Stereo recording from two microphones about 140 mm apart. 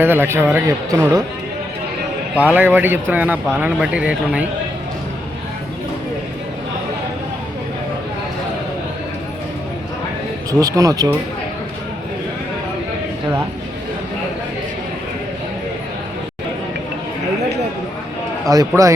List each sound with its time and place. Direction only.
0.0 s speech: 15° right (ahead or behind)
2.3 s speech: 10° right (ahead or behind)
10.6 s speech: 25° right (ahead or behind)
18.4 s speech: 25° right (ahead or behind)